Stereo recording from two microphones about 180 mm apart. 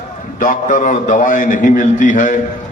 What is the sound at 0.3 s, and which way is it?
A man's voice, 45° left (ahead or behind).